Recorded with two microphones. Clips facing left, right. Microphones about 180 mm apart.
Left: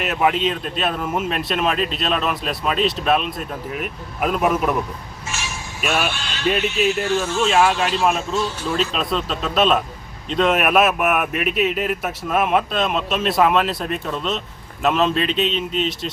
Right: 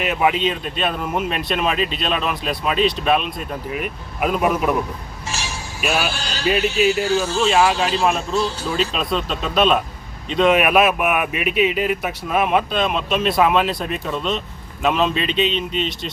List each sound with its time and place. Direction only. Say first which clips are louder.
0.0 s speech: even; centre (ahead or behind)
5.3 s a sound: right 1 dB; 35° right (ahead or behind)
5.8 s speech: even; centre (ahead or behind)
6.1 s speech: right 1 dB; 35° right (ahead or behind)
6.4 s speech: right 2 dB; centre (ahead or behind)